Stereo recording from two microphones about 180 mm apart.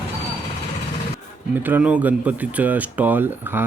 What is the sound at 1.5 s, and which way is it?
Speech, 10° right (ahead or behind).